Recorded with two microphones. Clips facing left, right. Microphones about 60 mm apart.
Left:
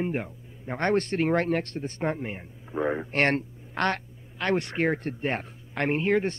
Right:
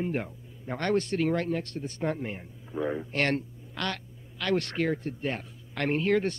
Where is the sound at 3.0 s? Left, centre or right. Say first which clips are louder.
Left 3 dB; left.